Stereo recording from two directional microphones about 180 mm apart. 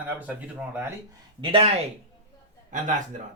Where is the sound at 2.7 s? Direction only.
45° right (ahead or behind).